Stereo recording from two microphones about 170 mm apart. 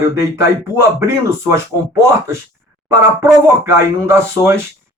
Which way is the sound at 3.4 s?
15° right (ahead or behind).